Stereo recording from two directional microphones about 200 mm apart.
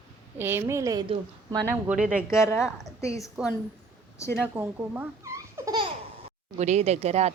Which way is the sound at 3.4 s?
5° right (ahead or behind).